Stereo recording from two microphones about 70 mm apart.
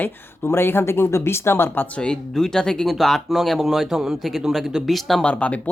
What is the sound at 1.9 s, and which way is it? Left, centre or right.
Speech, centre.